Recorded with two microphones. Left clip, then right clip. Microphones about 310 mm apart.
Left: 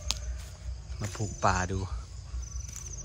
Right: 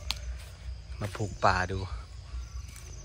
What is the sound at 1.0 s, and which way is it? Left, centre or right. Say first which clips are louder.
Speech: right 2 dB; centre.